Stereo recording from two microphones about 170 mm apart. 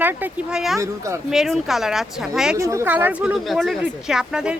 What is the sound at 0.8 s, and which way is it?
Speech, 15° right (ahead or behind).